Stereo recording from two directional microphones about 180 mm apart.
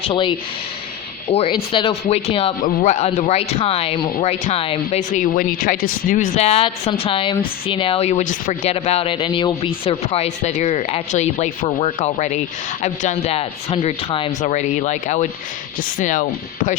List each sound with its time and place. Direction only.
0.0 s speech: 30° left (ahead or behind); by 8.7 s 45° left (ahead or behind)
8.7 s speech: 35° left (ahead or behind)